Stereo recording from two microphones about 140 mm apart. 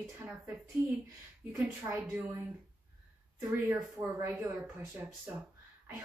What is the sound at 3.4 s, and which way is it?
A woman's voice, 20° right (ahead or behind).